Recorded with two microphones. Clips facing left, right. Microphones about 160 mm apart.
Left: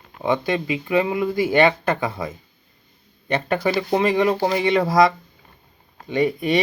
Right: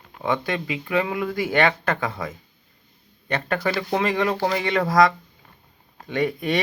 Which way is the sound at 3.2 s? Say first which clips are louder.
Left 3 dB; 15° left (ahead or behind).